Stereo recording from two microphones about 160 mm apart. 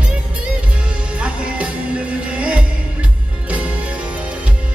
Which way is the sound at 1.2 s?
5° right (ahead or behind).